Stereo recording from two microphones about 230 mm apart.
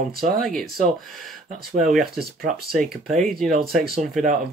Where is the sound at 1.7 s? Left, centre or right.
Centre.